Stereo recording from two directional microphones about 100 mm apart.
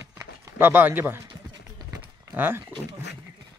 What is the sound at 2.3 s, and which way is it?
Speech, 20° right (ahead or behind).